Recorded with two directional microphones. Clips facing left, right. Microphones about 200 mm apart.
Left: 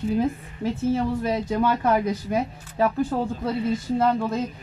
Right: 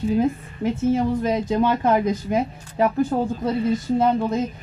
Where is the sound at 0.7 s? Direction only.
20° right (ahead or behind).